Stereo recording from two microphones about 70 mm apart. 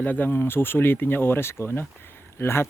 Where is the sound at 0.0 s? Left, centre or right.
Left.